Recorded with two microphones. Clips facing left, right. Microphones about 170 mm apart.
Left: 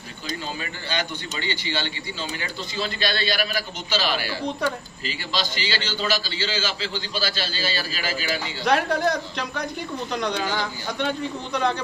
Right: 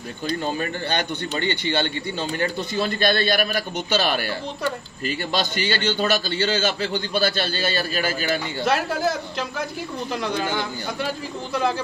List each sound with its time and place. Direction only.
0.6 s a man's voice: 55° right (ahead or behind)
8.6 s a man's voice: 5° right (ahead or behind)
11.0 s a man's voice: 5° right (ahead or behind)